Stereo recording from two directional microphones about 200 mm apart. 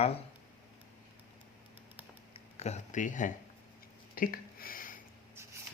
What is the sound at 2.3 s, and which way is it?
Speech, 35° left (ahead or behind).